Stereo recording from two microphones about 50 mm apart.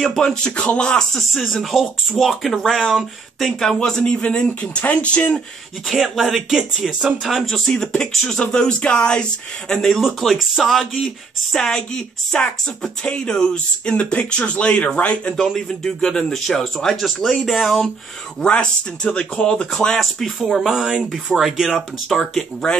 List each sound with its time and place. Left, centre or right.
0.0 s speech: centre
1.1 s speech: centre
2.8 s speech: centre
3.3 s speech: centre
4.2 s speech: left
5.9 s speech: centre
6.1 s speech: centre
7.4 s speech: centre
9.8 s speech: centre; by 15.3 s left
15.3 s speech: centre
18.4 s speech: left
19.5 s speech: centre